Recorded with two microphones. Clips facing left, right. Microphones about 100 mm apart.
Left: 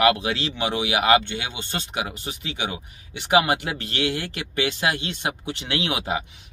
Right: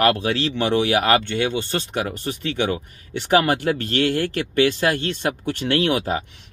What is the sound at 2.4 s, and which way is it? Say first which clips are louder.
Speech: right 8 dB; 45° right (ahead or behind).